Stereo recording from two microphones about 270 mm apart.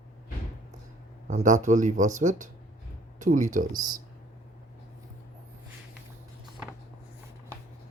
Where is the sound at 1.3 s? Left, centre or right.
Right.